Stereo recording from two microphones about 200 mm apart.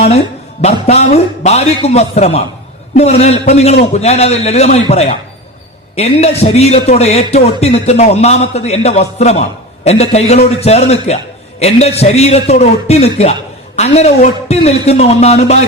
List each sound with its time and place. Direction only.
0.6 s speech: 35° left (ahead or behind)